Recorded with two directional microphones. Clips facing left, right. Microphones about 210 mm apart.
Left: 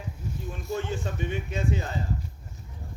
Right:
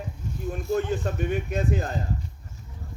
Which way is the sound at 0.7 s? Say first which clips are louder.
Right 5 dB; 55° right (ahead or behind).